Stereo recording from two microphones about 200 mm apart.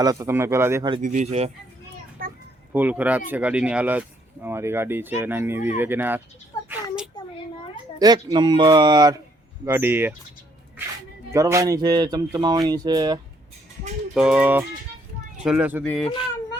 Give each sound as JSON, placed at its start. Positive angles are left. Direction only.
{"t": 0.0, "sound": "speech", "side_deg": -15}
{"t": 1.0, "sound": "speech", "side_deg": -35}
{"t": 2.2, "sound": "children playing", "side_deg": -45}
{"t": 2.7, "sound": "speech", "side_deg": -10}
{"t": 6.7, "sound": "a sound", "side_deg": -5}
{"t": 7.9, "sound": "speech", "side_deg": -20}
{"t": 11.3, "sound": "speech", "side_deg": -15}
{"t": 14.1, "sound": "speech", "side_deg": -5}
{"t": 15.8, "sound": "speech", "side_deg": 5}